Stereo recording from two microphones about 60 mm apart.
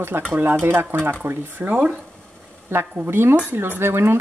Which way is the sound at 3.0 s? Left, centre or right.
Right.